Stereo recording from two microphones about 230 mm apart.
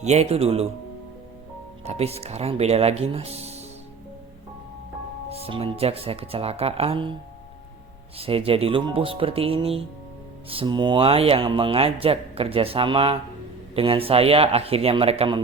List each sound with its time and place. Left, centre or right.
0.0 s speech: right
1.8 s speech: right
5.3 s speech: right
8.2 s speech: right